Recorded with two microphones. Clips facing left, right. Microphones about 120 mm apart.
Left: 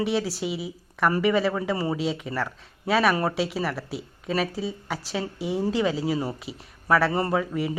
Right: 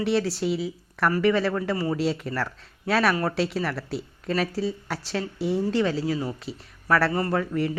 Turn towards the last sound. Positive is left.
turn(degrees=5)  # may be behind; listen again after turning